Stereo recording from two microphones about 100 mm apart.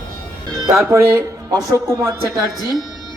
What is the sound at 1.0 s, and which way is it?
Speech, 35° right (ahead or behind).